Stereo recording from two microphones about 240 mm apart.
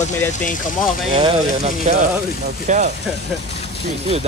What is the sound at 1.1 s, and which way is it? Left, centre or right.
Speech, right.